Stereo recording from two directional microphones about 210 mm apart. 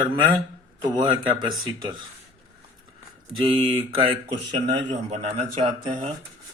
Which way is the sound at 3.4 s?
25° right (ahead or behind).